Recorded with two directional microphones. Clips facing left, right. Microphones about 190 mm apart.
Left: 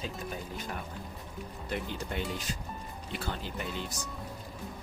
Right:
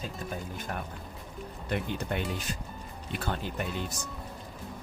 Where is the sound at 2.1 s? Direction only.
55° right (ahead or behind).